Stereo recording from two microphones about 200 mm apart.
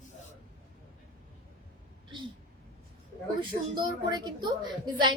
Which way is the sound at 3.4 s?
20° right (ahead or behind).